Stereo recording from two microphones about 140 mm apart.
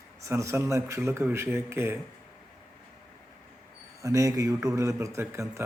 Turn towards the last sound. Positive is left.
turn(degrees=-20)  # may be behind; listen again after turning